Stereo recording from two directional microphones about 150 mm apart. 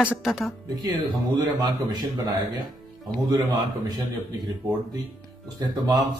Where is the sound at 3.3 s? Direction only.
25° right (ahead or behind).